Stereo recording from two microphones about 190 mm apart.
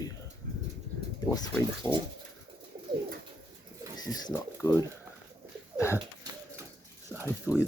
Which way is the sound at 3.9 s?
20° left (ahead or behind).